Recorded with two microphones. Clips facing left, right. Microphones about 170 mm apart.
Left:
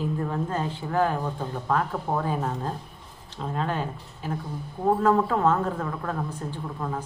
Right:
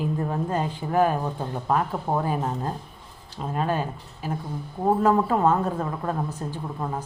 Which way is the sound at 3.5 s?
15° right (ahead or behind).